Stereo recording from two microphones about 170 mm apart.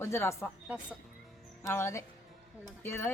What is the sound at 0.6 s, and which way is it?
Speech, 10° right (ahead or behind).